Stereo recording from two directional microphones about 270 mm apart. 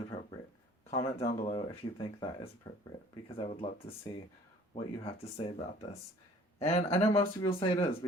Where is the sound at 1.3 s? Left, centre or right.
Left.